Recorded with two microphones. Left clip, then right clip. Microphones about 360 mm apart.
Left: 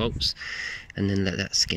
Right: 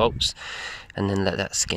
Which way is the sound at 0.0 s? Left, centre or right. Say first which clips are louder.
Right 5 dB; centre.